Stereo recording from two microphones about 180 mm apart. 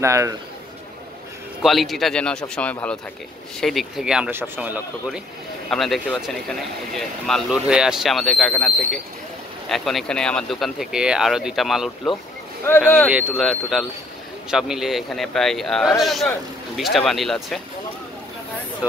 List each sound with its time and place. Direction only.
0.0 s a man's voice: 15° right (ahead or behind)
1.6 s speech: centre (ahead or behind)
12.6 s speech: 10° left (ahead or behind)